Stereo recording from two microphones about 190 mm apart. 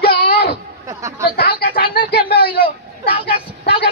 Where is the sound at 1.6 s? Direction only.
50° left (ahead or behind).